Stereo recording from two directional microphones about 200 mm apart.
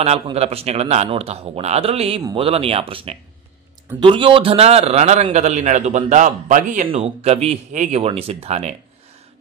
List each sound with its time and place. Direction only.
0.0 s a man's voice: 30° right (ahead or behind)